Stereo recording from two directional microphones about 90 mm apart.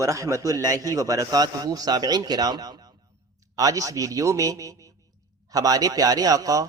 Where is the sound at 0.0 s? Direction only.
35° right (ahead or behind).